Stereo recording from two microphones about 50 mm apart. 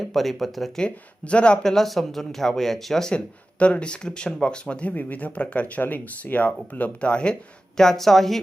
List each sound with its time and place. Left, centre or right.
0.0 s speech: centre
0.8 s speech: left
1.6 s speech: centre
3.2 s speech: left
7.8 s speech: centre